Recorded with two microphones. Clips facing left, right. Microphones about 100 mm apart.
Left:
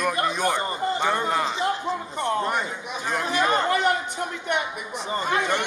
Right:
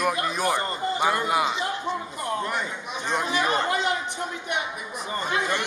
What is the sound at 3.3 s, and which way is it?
Speech, 10° right (ahead or behind).